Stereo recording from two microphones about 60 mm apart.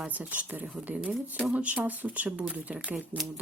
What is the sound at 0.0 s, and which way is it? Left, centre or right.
Speech, right.